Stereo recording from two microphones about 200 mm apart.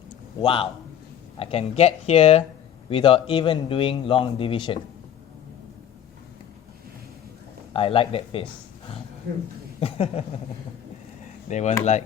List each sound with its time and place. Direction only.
0.4 s a man's voice: 25° left (ahead or behind)
7.7 s a man's voice: 30° left (ahead or behind)
9.3 s speech: 50° right (ahead or behind)
9.8 s speech: 30° left (ahead or behind)
11.4 s speech: 35° left (ahead or behind)